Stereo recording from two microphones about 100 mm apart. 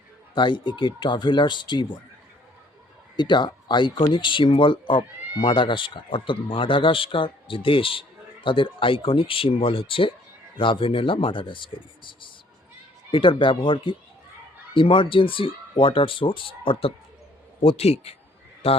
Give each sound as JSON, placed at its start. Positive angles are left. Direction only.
{"t": 0.3, "sound": "speech", "side_deg": 50}
{"t": 3.2, "sound": "speech", "side_deg": 50}
{"t": 17.6, "sound": "speech", "side_deg": 80}